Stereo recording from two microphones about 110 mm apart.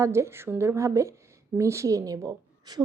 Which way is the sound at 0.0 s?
25° right (ahead or behind).